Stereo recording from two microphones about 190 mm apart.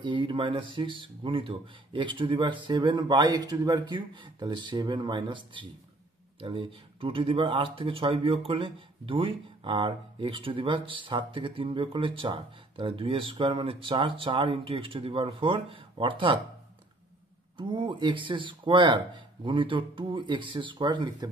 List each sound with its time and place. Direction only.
0.0 s speech: 25° right (ahead or behind)
17.6 s speech: 25° right (ahead or behind)